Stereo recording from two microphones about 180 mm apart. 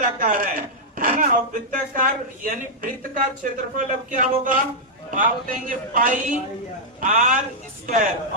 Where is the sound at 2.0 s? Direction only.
50° right (ahead or behind).